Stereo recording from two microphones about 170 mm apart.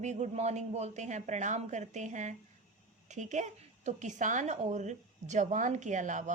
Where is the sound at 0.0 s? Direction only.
40° right (ahead or behind).